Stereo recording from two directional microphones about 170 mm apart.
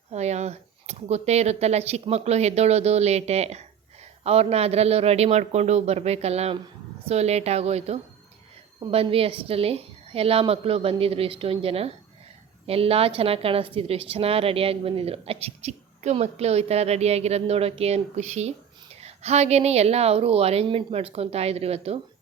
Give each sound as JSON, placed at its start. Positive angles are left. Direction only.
{"t": 0.1, "sound": "a woman's voice", "side_deg": -40}